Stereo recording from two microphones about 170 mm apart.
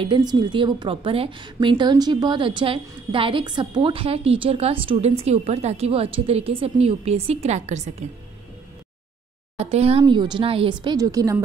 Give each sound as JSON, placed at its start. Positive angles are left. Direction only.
{"t": 0.0, "sound": "a woman's voice", "side_deg": -25}
{"t": 9.6, "sound": "speech", "side_deg": -35}